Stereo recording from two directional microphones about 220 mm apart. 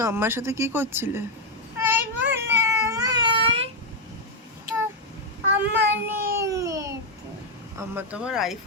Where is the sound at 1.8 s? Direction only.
10° right (ahead or behind).